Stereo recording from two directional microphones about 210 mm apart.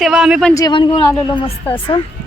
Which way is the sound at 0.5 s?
20° left (ahead or behind).